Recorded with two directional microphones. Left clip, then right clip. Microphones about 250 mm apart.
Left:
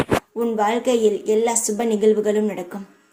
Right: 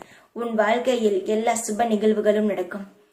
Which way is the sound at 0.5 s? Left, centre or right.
Left.